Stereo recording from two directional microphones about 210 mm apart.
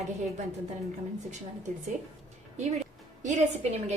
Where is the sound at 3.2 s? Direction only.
35° right (ahead or behind).